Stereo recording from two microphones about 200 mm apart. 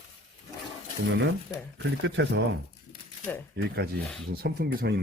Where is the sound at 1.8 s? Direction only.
65° right (ahead or behind).